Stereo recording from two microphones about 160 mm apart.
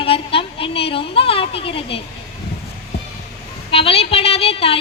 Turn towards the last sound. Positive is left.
turn(degrees=35)  # may be behind; listen again after turning